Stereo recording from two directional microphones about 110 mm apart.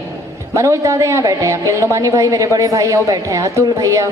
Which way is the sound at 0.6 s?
30° right (ahead or behind).